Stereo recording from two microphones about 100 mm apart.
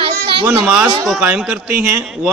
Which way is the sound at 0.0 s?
65° right (ahead or behind).